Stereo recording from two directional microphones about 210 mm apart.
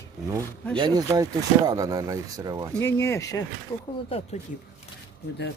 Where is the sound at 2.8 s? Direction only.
10° left (ahead or behind).